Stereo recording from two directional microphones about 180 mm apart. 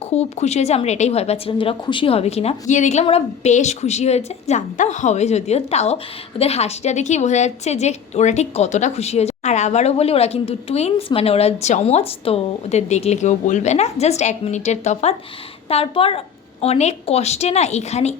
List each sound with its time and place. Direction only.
0.0 s a woman's voice: 35° left (ahead or behind)